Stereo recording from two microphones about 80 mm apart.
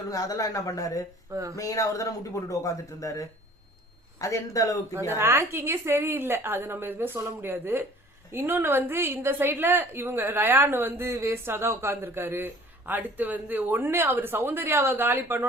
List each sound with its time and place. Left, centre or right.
0.1 s speech: left
1.3 s speech: right
1.5 s speech: left
5.1 s a woman's voice: right